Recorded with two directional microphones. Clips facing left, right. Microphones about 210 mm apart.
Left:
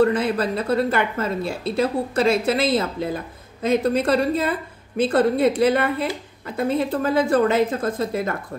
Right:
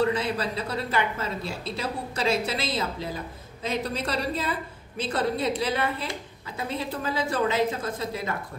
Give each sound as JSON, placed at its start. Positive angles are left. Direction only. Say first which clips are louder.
{"t": 0.0, "sound": "a woman's voice", "louder": "left 6 dB", "side_deg": 50}